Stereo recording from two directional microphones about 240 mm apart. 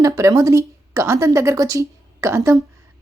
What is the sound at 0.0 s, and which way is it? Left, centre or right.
A woman's voice, centre.